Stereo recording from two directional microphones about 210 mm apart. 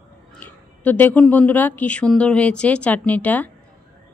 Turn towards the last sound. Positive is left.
turn(degrees=5)  # may be behind; listen again after turning